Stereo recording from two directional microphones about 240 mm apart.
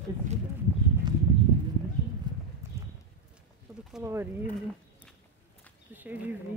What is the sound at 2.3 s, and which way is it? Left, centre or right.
Clip-clop, centre.